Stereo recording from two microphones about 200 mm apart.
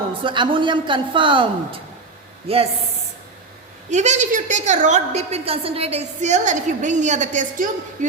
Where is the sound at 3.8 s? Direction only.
35° right (ahead or behind).